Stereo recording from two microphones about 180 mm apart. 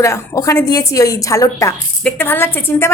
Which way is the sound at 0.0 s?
15° left (ahead or behind).